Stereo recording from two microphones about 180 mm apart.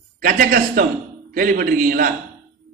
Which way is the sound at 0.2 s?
50° right (ahead or behind).